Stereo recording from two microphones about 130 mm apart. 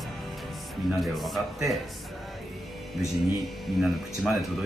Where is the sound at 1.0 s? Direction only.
Centre (ahead or behind).